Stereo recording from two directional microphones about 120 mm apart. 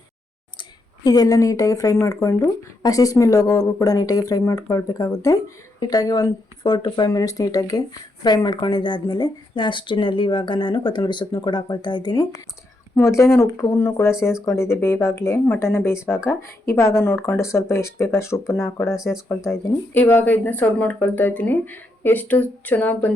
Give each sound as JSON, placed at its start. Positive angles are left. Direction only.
{"t": 1.0, "sound": "speech", "side_deg": 30}